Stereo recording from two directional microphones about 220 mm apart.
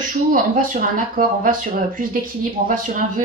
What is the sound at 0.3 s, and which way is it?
Speech, 40° right (ahead or behind).